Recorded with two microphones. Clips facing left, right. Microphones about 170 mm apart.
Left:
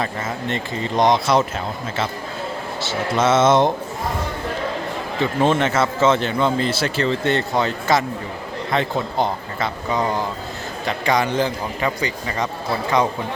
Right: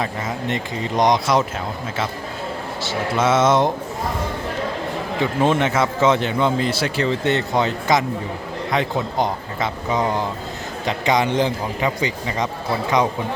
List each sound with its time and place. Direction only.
0.0 s a man's voice: 15° right (ahead or behind)
3.2 s a man's voice: 10° right (ahead or behind)
5.2 s a man's voice: 15° right (ahead or behind)
9.1 s a man's voice: 15° right (ahead or behind)